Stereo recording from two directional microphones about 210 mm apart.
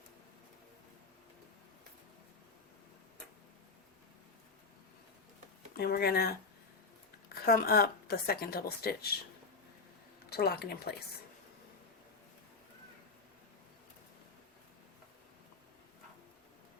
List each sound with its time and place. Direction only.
5.7 s speech: 50° left (ahead or behind)
10.2 s speech: 50° left (ahead or behind)